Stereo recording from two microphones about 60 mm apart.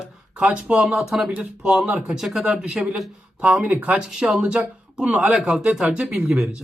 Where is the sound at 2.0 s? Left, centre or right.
Centre; by 5.3 s right.